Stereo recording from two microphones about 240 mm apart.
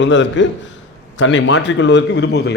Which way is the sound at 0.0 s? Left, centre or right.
Left.